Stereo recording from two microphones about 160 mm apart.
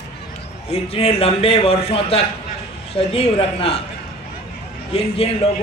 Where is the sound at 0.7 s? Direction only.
40° left (ahead or behind).